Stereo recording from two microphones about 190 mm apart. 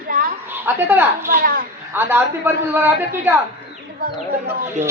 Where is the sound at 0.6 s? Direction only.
10° right (ahead or behind).